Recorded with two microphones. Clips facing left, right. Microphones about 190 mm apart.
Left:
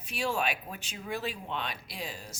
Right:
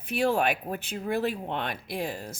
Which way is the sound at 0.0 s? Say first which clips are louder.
Right 7 dB; 55° right (ahead or behind).